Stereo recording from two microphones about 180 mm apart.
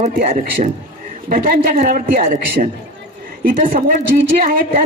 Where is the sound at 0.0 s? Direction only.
45° right (ahead or behind).